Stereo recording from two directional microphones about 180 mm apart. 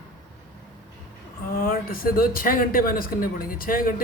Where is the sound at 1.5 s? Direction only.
55° left (ahead or behind).